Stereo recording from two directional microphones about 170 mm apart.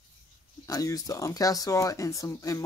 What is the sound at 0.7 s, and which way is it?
Speech, 20° left (ahead or behind).